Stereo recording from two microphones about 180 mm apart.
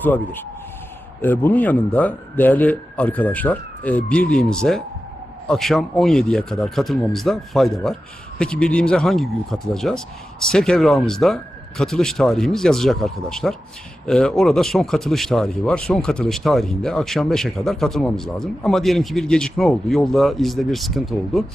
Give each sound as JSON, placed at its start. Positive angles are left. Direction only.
{"t": 0.0, "sound": "speech", "side_deg": 10}